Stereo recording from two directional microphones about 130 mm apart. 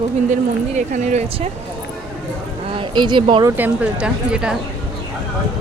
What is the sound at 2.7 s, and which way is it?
Speech, 40° right (ahead or behind).